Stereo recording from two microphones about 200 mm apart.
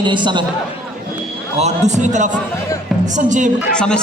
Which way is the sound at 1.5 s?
35° right (ahead or behind).